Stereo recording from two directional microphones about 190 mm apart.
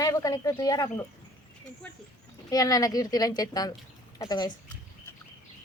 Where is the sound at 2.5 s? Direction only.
20° left (ahead or behind).